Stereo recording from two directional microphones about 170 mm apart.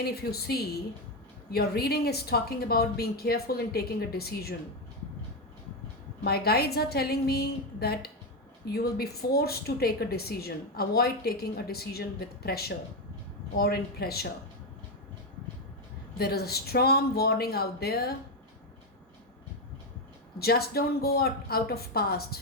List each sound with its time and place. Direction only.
0.0 s speech: 65° left (ahead or behind)
6.2 s speech: 65° left (ahead or behind)
16.1 s speech: 65° left (ahead or behind)
20.4 s speech: 65° left (ahead or behind)